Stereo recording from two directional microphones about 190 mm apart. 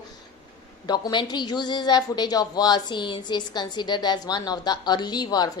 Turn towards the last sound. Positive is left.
turn(degrees=20)  # may be behind; listen again after turning